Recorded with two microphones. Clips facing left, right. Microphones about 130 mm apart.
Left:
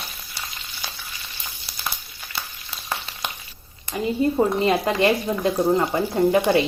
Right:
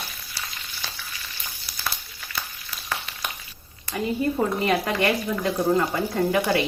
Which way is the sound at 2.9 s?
25° left (ahead or behind).